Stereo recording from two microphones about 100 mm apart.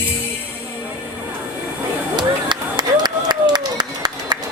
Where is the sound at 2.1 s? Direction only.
45° right (ahead or behind).